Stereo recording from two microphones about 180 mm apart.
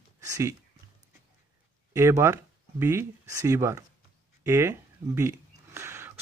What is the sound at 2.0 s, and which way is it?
Speech, 15° right (ahead or behind).